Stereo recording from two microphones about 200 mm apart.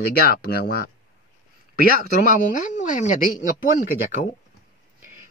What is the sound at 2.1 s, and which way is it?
Speech, 40° left (ahead or behind).